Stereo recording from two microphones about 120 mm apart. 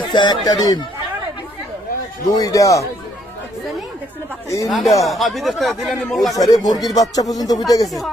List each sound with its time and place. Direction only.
0.1 s speech: 40° left (ahead or behind)
2.2 s a man's voice: 30° left (ahead or behind)
4.4 s a man's voice: 25° left (ahead or behind)
4.7 s speech: centre (ahead or behind)
6.3 s speech: 30° left (ahead or behind)